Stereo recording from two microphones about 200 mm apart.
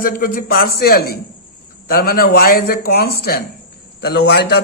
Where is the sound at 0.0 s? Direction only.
45° left (ahead or behind).